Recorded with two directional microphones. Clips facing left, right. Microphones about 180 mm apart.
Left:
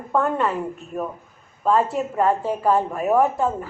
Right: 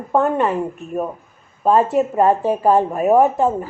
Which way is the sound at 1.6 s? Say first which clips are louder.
Right 5 dB; 20° right (ahead or behind).